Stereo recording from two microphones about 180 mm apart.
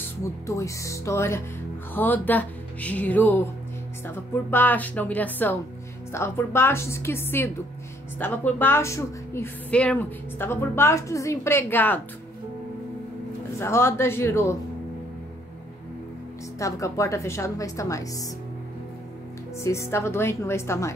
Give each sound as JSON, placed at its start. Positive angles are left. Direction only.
{"t": 0.2, "sound": "a woman's voice", "side_deg": 15}
{"t": 13.6, "sound": "a woman's voice", "side_deg": 15}
{"t": 16.5, "sound": "a woman's voice", "side_deg": 15}
{"t": 19.6, "sound": "a woman's voice", "side_deg": 15}